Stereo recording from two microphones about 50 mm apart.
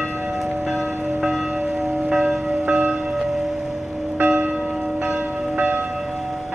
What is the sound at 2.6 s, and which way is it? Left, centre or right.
Church bell, right.